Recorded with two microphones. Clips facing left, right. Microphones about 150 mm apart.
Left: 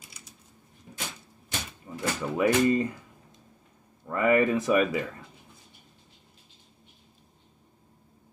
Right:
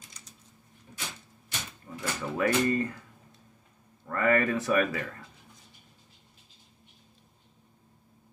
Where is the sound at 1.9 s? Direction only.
20° left (ahead or behind).